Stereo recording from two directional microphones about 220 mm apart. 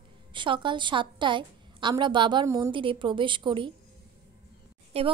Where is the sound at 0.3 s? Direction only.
20° right (ahead or behind).